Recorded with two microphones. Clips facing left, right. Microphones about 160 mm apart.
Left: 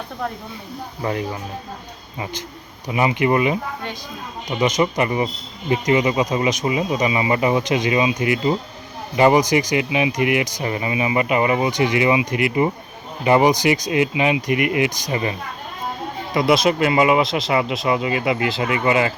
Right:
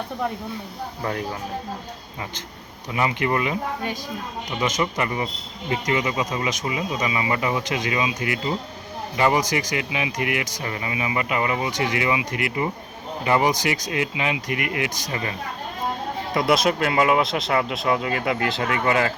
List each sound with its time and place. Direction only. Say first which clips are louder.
1.0 s speech: left 4 dB; 5° left (ahead or behind)
2.9 s speech: left 5 dB; 15° left (ahead or behind)
16.3 s speech: left 3 dB; 5° left (ahead or behind)